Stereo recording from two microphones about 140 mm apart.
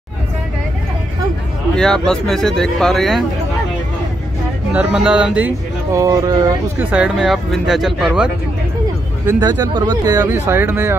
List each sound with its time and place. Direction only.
1.8 s speech: 5° left (ahead or behind)
4.7 s speech: 5° right (ahead or behind)
5.9 s speech: 25° right (ahead or behind)
6.8 s speech: 10° right (ahead or behind)
9.4 s speech: 30° right (ahead or behind)
10.0 s speech: 15° right (ahead or behind)